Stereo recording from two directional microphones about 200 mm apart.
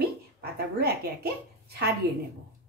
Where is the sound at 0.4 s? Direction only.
50° right (ahead or behind).